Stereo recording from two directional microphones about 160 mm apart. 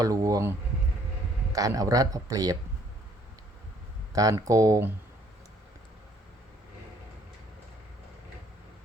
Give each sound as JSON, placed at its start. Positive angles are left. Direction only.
{"t": 0.0, "sound": "speech", "side_deg": -20}
{"t": 1.5, "sound": "speech", "side_deg": -20}
{"t": 4.1, "sound": "speech", "side_deg": -20}